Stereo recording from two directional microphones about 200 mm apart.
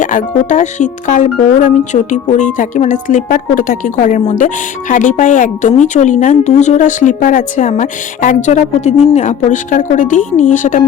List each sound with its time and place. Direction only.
0.0 s speech: 40° left (ahead or behind)